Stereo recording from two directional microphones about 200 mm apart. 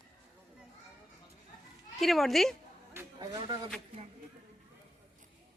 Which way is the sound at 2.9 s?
15° right (ahead or behind).